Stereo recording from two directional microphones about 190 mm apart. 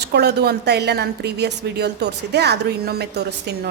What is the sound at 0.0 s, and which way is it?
A woman's voice, 60° right (ahead or behind).